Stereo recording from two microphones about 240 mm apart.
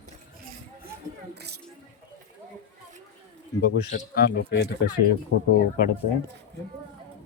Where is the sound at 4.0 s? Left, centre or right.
Left.